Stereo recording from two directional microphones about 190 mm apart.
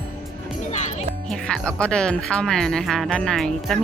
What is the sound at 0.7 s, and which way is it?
Music, 40° left (ahead or behind).